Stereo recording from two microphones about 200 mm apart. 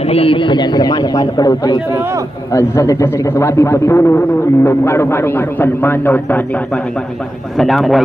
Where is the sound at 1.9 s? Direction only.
15° right (ahead or behind).